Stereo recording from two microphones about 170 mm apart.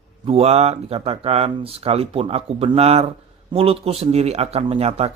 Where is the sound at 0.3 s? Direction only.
35° right (ahead or behind).